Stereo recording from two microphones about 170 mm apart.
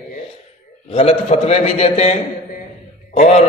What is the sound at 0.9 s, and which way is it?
A man's voice, 40° left (ahead or behind).